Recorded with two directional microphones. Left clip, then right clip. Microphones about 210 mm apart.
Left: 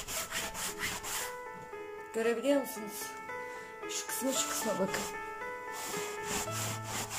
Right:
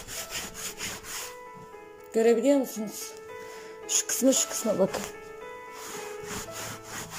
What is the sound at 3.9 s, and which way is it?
Music, 30° right (ahead or behind).